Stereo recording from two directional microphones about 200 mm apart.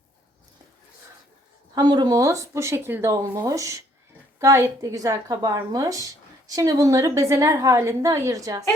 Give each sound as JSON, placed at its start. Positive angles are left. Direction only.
{"t": 1.7, "sound": "speech", "side_deg": -20}